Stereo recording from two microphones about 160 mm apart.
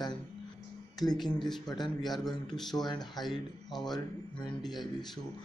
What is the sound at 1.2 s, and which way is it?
Speech, centre (ahead or behind).